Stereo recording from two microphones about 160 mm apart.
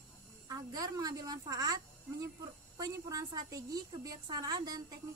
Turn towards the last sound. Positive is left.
turn(degrees=-25)  # may be behind; listen again after turning